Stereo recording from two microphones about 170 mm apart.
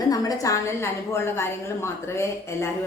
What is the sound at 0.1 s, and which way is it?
A woman's voice, 20° left (ahead or behind).